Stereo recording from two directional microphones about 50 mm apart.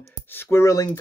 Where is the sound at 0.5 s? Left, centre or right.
Left.